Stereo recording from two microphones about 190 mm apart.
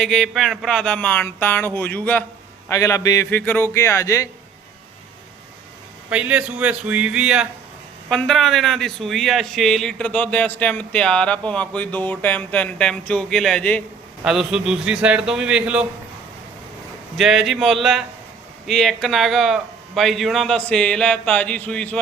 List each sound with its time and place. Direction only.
0.0 s speech: centre (ahead or behind)
6.1 s speech: 5° right (ahead or behind)
17.2 s speech: centre (ahead or behind)